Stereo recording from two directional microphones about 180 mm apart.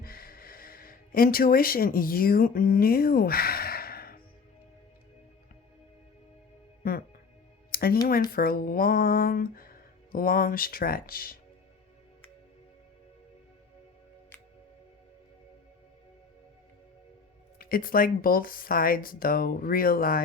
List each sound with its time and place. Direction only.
0.0 s a sound: 55° left (ahead or behind)
6.8 s speech: 55° left (ahead or behind)
7.7 s music: 55° left (ahead or behind)
8.3 s speech: 55° left (ahead or behind)
17.6 s speech: 55° left (ahead or behind)